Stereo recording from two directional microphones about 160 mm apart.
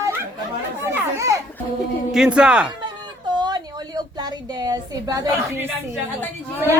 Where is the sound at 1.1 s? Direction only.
20° right (ahead or behind).